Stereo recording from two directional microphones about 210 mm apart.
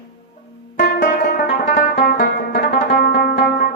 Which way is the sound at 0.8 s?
40° left (ahead or behind).